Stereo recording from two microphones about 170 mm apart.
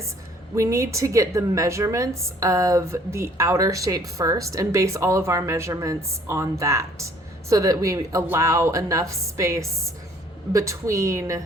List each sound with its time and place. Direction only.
0.5 s a woman's voice: 15° right (ahead or behind)